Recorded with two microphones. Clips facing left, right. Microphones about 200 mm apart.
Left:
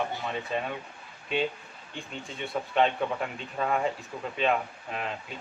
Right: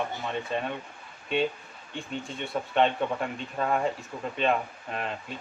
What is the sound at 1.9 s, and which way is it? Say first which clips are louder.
Speech: right 3 dB; centre (ahead or behind).